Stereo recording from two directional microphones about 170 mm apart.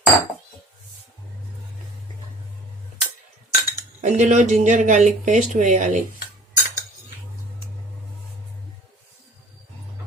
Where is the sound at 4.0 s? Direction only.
45° right (ahead or behind).